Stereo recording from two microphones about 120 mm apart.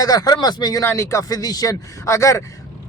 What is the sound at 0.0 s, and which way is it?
A man's voice, 30° left (ahead or behind).